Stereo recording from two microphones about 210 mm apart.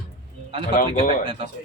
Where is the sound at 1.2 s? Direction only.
25° right (ahead or behind).